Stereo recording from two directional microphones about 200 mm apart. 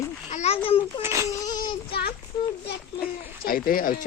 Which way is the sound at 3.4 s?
45° left (ahead or behind).